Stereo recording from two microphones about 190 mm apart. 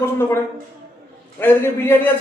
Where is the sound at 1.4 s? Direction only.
10° left (ahead or behind).